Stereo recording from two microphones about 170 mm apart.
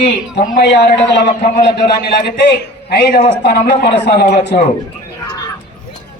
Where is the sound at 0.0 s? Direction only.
85° left.